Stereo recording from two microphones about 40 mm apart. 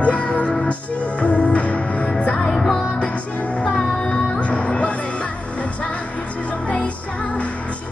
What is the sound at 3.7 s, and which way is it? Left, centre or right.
Music, left.